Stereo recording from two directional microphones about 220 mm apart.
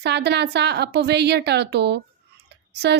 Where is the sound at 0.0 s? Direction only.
50° right (ahead or behind).